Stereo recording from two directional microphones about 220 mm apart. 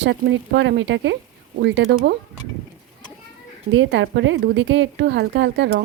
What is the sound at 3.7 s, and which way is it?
A woman's voice, 60° right (ahead or behind).